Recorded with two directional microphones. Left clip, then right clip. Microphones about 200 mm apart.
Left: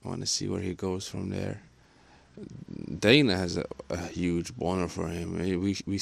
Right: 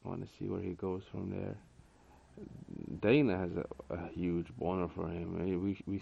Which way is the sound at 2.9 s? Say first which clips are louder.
Left 7 dB; 45° left (ahead or behind).